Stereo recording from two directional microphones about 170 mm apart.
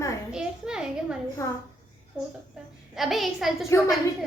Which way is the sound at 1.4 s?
20° left (ahead or behind).